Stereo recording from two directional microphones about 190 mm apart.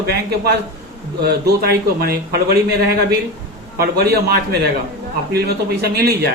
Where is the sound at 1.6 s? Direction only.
55° right (ahead or behind).